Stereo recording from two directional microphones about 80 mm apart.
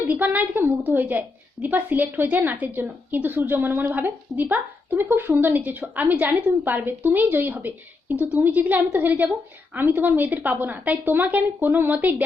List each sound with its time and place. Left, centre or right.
0.1 s a woman's voice: centre